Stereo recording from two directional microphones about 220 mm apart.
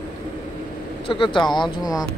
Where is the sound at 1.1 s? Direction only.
25° left (ahead or behind).